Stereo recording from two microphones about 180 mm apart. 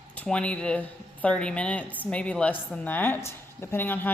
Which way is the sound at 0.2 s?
5° left (ahead or behind).